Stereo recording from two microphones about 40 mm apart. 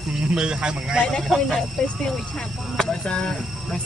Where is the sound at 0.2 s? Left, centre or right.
Right.